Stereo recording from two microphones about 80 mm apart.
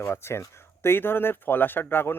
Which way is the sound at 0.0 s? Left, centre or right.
Left.